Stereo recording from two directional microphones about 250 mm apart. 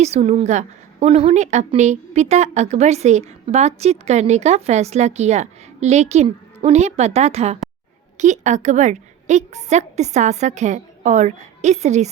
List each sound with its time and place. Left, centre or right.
0.0 s a woman's voice: right